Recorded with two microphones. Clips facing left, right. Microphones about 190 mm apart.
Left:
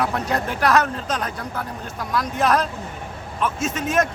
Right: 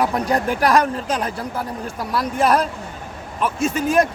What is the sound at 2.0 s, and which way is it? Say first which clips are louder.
Speech: right 1 dB; 35° right (ahead or behind).